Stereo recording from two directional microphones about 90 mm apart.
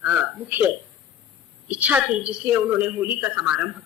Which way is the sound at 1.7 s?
15° right (ahead or behind).